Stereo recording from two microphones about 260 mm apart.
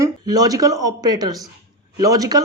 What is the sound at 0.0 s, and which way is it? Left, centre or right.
Speech, centre.